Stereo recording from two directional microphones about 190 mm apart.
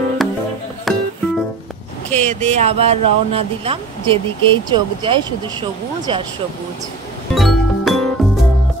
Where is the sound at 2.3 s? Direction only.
35° right (ahead or behind).